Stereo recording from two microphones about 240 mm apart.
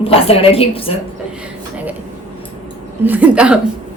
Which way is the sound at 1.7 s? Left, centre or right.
Centre.